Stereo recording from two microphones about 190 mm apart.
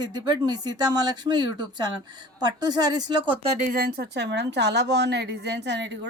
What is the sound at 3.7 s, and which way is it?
A woman's voice, 55° right (ahead or behind).